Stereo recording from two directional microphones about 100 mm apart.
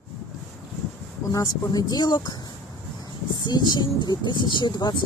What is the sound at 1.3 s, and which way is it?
Speech, 40° left (ahead or behind).